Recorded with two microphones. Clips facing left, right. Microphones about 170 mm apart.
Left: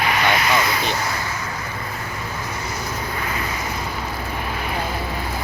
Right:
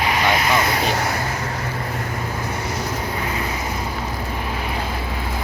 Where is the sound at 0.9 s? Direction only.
60° right (ahead or behind).